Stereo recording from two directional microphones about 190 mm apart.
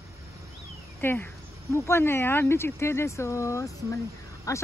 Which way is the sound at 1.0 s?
10° left (ahead or behind).